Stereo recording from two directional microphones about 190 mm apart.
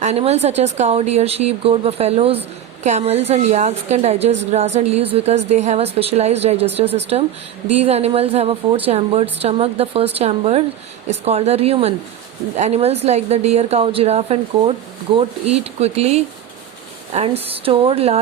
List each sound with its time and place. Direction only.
0.0 s a woman's voice: 35° right (ahead or behind)